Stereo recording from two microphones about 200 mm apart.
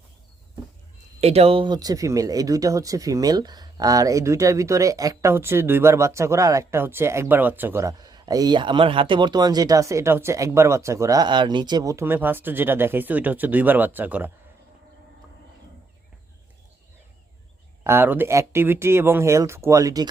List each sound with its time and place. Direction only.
1.2 s speech: 30° right (ahead or behind); by 14.3 s 10° right (ahead or behind)
17.8 s speech: 10° right (ahead or behind)